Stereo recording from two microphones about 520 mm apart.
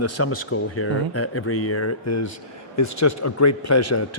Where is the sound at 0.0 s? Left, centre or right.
Left.